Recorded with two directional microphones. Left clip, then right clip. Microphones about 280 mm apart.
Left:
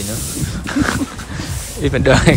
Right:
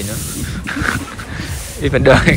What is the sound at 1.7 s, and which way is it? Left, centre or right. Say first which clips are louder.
Speech: right 3 dB; centre.